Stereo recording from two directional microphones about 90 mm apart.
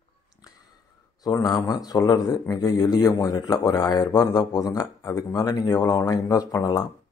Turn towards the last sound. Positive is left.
turn(degrees=45)  # may be behind; listen again after turning